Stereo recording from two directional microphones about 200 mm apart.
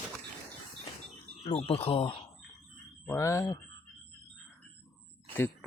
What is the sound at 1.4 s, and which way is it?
Speech, 30° left (ahead or behind).